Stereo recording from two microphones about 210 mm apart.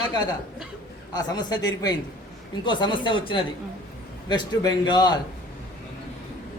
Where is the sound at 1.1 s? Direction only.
20° left (ahead or behind).